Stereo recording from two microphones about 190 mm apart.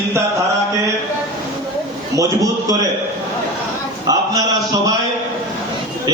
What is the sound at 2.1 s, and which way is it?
Speech, 15° right (ahead or behind).